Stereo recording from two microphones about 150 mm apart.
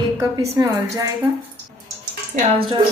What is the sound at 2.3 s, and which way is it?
Speech, 55° right (ahead or behind).